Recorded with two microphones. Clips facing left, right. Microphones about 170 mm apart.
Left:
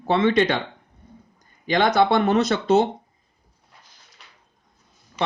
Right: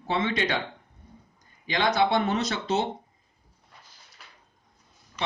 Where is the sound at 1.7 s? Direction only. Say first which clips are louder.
Left 5 dB; 50° left (ahead or behind).